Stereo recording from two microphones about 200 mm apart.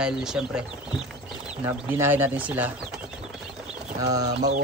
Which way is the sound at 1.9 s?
10° right (ahead or behind).